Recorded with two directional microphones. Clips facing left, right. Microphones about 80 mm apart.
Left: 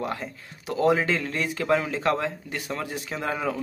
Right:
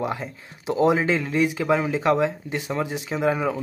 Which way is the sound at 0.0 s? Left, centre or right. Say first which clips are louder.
Right 3 dB; centre.